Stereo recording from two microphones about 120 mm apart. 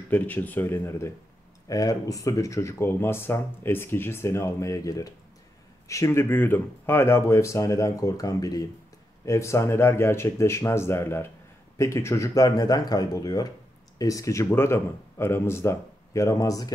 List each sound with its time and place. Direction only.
0.1 s speech: 15° left (ahead or behind); by 16.7 s 30° left (ahead or behind)